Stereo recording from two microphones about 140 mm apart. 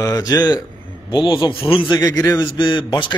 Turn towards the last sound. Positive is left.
turn(degrees=35)  # may be behind; listen again after turning